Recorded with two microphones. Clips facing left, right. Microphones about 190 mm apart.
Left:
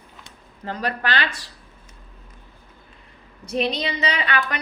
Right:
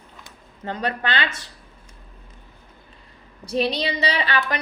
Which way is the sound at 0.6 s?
25° right (ahead or behind).